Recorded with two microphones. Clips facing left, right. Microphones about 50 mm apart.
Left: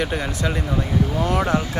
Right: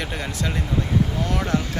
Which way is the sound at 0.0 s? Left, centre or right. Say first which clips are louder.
Left 4 dB; centre.